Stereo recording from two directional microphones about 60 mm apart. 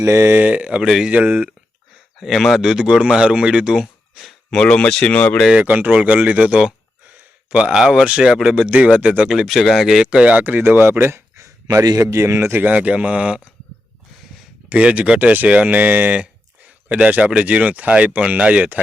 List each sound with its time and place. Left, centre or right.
0.0 s speech: right
0.3 s speech: right
0.9 s speech: centre
1.1 s speech: right
2.1 s speech: centre
4.5 s speech: centre
5.6 s speech: right; by 8.5 s centre
8.5 s speech: centre
10.4 s speech: right
11.3 s speech: right
12.6 s speech: right
14.7 s speech: right